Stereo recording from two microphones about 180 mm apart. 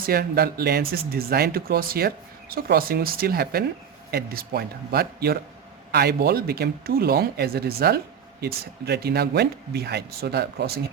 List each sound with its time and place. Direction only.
0.0 s speech: 60° right (ahead or behind)